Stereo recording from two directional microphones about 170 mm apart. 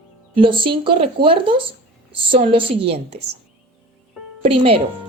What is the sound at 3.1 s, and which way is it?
Speech, 80° right.